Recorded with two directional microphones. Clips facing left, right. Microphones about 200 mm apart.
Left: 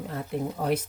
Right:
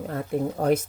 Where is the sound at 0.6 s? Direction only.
45° right (ahead or behind).